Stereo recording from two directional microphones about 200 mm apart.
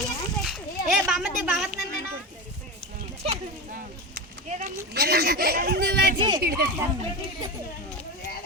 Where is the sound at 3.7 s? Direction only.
40° right (ahead or behind).